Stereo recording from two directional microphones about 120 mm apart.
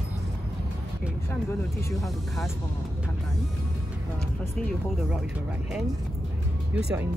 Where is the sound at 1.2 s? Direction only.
20° left (ahead or behind).